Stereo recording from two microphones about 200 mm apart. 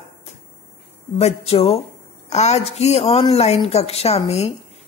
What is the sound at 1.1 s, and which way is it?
Speech, 30° left (ahead or behind).